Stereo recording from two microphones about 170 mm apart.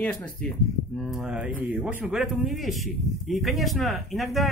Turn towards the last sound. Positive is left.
turn(degrees=0)  # may be behind; listen again after turning